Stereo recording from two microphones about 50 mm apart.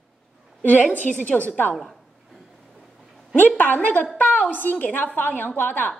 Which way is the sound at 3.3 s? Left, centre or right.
Left.